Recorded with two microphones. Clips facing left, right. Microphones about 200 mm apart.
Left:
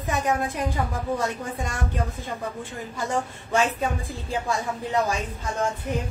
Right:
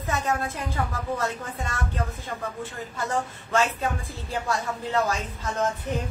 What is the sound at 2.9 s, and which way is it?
Speech, 15° left (ahead or behind).